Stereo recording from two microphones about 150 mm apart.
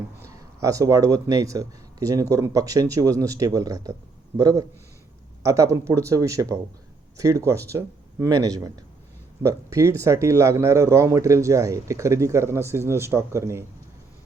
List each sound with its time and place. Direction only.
0.2 s a man's voice: 20° right (ahead or behind)